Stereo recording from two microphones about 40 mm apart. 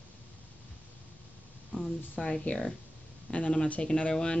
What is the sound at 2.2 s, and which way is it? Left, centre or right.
Speech, left.